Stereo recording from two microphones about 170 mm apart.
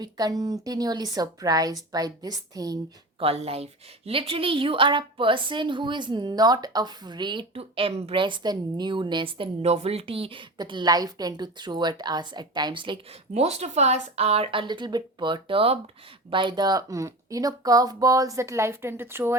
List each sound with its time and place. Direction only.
0.0 s a woman's voice: 20° right (ahead or behind)
3.2 s a woman's voice: 35° right (ahead or behind); by 19.4 s 15° right (ahead or behind)